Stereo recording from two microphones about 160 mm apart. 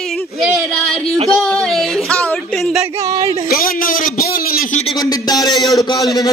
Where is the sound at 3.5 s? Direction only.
65° left (ahead or behind).